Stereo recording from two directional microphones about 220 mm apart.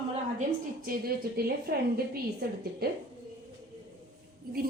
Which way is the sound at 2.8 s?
45° right (ahead or behind).